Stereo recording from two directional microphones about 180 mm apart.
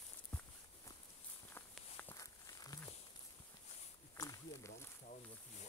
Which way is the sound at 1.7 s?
10° left (ahead or behind).